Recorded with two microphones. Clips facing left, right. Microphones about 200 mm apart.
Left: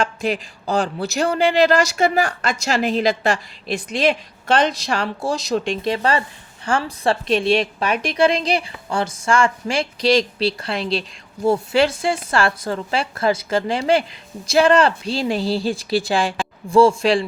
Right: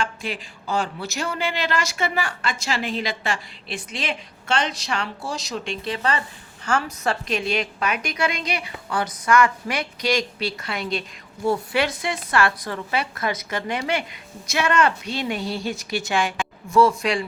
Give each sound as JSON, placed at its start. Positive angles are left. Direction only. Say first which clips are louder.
{"t": 0.0, "sound": "speech", "louder": "left 7 dB", "side_deg": 40}
{"t": 4.7, "sound": "speech", "louder": "left 5 dB", "side_deg": 35}